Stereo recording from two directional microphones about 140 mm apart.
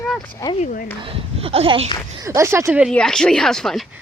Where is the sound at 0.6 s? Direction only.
90° left.